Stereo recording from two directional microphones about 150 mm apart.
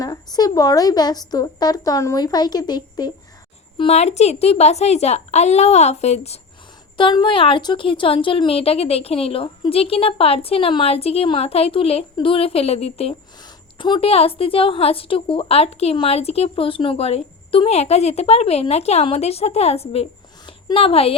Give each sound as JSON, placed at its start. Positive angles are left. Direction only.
{"t": 0.0, "sound": "a woman's voice", "side_deg": 25}
{"t": 3.8, "sound": "a woman's voice", "side_deg": 45}
{"t": 6.9, "sound": "speech", "side_deg": 30}
{"t": 13.7, "sound": "a woman's voice", "side_deg": 30}